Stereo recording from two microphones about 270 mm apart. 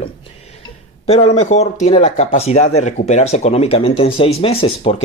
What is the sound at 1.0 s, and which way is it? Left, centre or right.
Speech, left.